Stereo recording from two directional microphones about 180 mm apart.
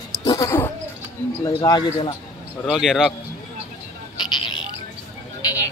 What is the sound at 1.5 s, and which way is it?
Speech, 25° left (ahead or behind).